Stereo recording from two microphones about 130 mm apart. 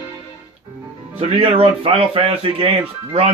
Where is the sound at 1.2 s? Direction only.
45° right (ahead or behind).